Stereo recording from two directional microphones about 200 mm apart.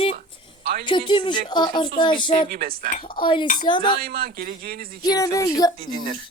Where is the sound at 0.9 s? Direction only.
25° left (ahead or behind).